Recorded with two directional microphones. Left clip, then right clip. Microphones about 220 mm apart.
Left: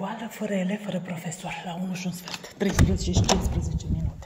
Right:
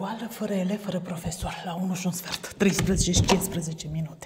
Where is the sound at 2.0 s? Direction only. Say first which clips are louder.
Right 3 dB; 40° right (ahead or behind).